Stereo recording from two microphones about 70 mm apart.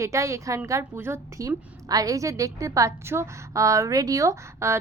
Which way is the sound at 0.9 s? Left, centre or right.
Right.